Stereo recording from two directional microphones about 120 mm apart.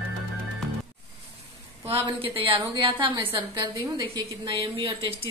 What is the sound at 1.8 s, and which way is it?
A woman's voice, 50° right (ahead or behind).